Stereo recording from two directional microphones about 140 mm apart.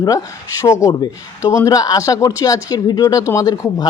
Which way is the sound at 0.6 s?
20° left (ahead or behind).